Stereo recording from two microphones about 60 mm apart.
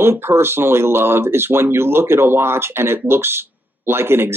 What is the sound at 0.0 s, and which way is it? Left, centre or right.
Speech, right.